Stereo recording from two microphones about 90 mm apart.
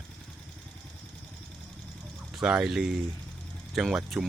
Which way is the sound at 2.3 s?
5° right (ahead or behind).